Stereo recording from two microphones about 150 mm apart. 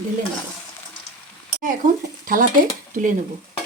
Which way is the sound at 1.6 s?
65° right (ahead or behind).